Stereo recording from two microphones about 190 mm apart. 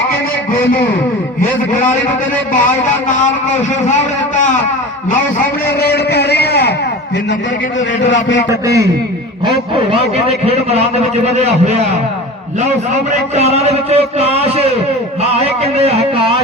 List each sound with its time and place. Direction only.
3.8 s a man's voice: 40° left (ahead or behind)
5.6 s a man's voice: 55° left (ahead or behind)
8.0 s a man's voice: 70° left (ahead or behind)
8.4 s a man's voice: 15° right (ahead or behind)
9.7 s a man's voice: 30° right (ahead or behind)
12.9 s a man's voice: 35° right (ahead or behind)
15.8 s a man's voice: 30° right (ahead or behind)